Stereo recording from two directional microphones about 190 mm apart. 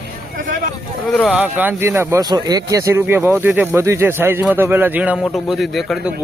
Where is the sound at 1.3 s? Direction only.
10° right (ahead or behind).